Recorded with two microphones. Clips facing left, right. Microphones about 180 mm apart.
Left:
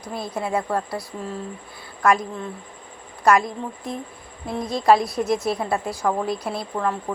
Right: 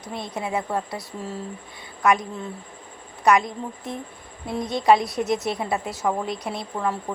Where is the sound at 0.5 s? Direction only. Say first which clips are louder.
Left 2 dB; 20° right (ahead or behind).